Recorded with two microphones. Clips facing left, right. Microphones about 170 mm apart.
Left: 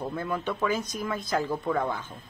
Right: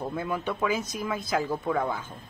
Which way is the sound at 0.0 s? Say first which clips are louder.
Even; 10° right (ahead or behind).